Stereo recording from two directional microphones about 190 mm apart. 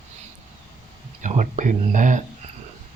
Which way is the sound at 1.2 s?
40° right (ahead or behind).